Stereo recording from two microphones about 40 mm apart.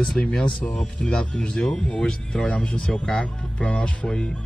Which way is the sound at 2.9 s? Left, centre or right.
Centre.